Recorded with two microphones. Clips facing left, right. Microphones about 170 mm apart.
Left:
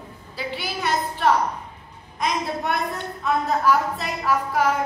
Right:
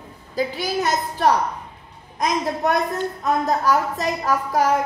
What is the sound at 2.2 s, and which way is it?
A woman's voice, 40° right (ahead or behind).